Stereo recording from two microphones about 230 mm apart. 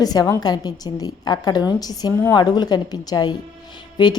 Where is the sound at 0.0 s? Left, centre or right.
Centre.